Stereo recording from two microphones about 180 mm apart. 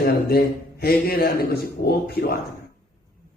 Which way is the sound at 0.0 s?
60° left (ahead or behind).